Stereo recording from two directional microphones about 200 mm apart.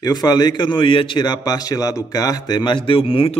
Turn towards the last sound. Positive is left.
turn(degrees=25)  # may be behind; listen again after turning